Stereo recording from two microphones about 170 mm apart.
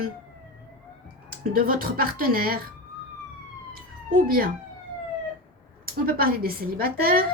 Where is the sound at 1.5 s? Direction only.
60° right (ahead or behind).